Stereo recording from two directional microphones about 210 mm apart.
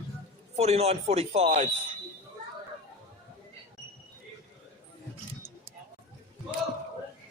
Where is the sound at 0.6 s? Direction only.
30° right (ahead or behind).